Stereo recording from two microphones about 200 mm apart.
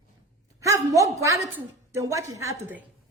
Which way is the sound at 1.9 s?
15° right (ahead or behind).